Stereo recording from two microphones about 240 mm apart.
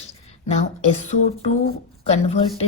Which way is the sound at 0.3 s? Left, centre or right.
Left.